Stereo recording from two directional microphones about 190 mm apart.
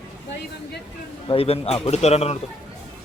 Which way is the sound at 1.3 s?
30° left (ahead or behind).